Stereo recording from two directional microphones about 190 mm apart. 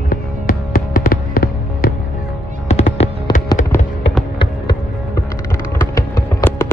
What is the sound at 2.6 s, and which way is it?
Music, 35° left (ahead or behind).